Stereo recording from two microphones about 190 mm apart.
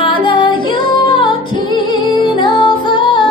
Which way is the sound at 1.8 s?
25° left (ahead or behind).